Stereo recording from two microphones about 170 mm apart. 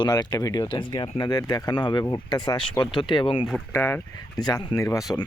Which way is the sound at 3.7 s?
15° left (ahead or behind).